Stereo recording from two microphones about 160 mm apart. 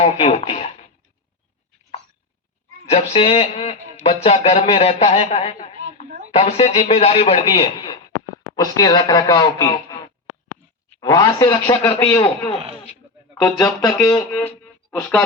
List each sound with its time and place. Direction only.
0.0 s speech: 40° left (ahead or behind)
2.9 s speech: 40° left (ahead or behind)
5.5 s a sound: 45° left (ahead or behind)
6.3 s speech: 40° left (ahead or behind)
8.5 s speech: 25° left (ahead or behind)
11.0 s speech: 20° left (ahead or behind)
13.8 s speech: 20° left (ahead or behind)